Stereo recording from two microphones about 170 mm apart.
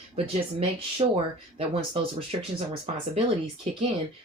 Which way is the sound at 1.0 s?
25° right (ahead or behind).